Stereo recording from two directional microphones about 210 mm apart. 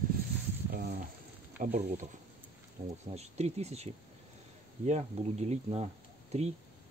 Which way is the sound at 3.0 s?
30° right (ahead or behind).